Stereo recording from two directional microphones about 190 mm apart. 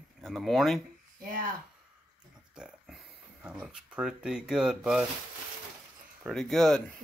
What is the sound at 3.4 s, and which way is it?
Speech, 5° right (ahead or behind).